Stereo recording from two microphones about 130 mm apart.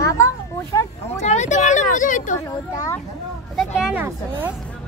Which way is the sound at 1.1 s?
65° left (ahead or behind).